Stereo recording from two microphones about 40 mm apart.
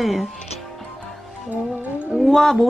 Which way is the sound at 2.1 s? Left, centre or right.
Centre.